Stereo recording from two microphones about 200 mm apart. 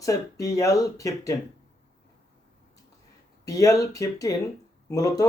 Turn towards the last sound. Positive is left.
turn(degrees=15)  # may be behind; listen again after turning